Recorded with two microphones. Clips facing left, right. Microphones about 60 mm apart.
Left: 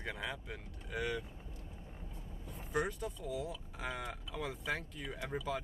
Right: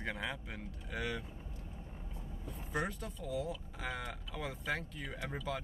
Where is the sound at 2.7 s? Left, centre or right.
Centre.